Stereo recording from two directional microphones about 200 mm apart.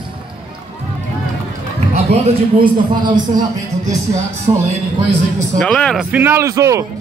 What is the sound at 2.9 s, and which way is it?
Speech, 20° right (ahead or behind).